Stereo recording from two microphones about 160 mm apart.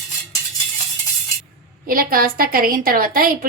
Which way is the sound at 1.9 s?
65° right (ahead or behind).